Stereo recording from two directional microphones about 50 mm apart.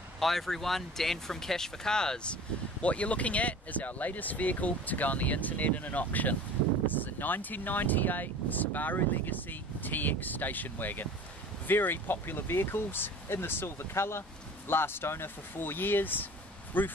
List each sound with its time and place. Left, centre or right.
0.2 s speech: centre
2.8 s speech: left